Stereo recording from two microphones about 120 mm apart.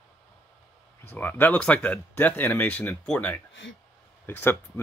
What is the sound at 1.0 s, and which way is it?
Speech, 15° left (ahead or behind).